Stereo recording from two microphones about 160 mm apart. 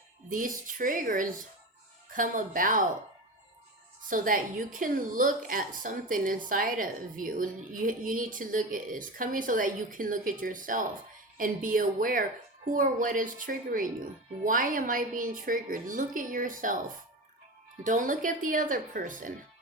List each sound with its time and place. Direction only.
0.3 s a woman's voice: 60° right (ahead or behind)
4.1 s a woman's voice: 55° right (ahead or behind)
17.8 s a woman's voice: 55° right (ahead or behind)